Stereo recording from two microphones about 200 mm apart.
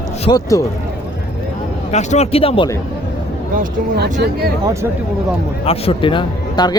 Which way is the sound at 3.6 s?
55° right (ahead or behind).